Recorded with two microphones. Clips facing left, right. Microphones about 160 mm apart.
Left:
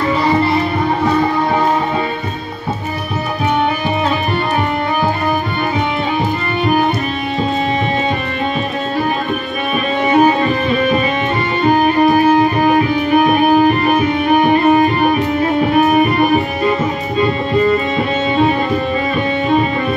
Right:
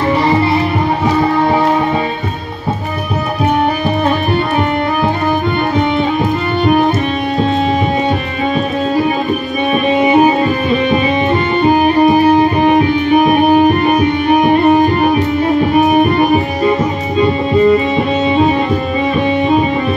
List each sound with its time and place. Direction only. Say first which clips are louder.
6.6 s music: right 3 dB; centre (ahead or behind)
9.8 s music: right 2 dB; 5° right (ahead or behind)
11.7 s music: right 1 dB; 5° right (ahead or behind)